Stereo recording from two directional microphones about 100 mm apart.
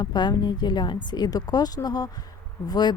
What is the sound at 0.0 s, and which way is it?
Speech, 45° left (ahead or behind).